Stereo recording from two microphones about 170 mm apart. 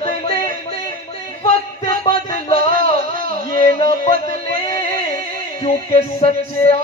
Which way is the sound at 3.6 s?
40° left (ahead or behind).